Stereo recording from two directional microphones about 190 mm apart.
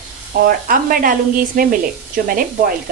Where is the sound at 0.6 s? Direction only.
45° right (ahead or behind).